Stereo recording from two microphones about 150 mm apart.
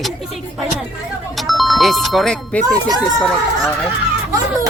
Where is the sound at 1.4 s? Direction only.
Centre (ahead or behind).